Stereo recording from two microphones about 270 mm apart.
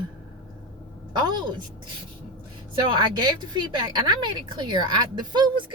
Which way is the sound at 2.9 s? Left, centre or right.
Centre.